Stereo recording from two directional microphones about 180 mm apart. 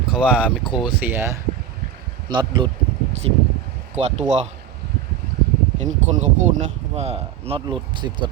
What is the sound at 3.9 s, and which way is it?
Speech, 40° right (ahead or behind).